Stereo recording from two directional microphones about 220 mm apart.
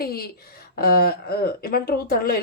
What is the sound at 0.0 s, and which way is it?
A woman's voice, 45° left (ahead or behind).